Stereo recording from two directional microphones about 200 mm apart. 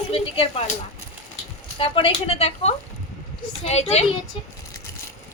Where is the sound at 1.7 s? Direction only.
25° left (ahead or behind).